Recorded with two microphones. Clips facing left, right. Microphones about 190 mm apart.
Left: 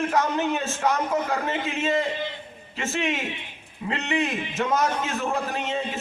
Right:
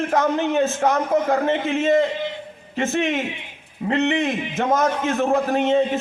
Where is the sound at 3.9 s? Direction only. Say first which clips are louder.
Right 6 dB; 55° right (ahead or behind).